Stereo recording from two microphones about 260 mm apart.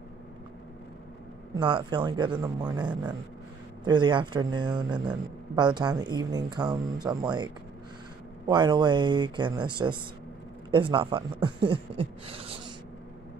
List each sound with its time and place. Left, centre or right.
1.5 s speech: centre